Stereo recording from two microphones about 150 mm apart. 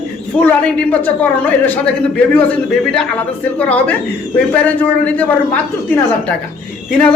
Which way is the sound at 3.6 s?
10° left (ahead or behind).